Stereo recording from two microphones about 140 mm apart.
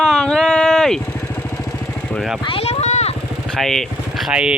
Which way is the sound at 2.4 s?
45° left (ahead or behind).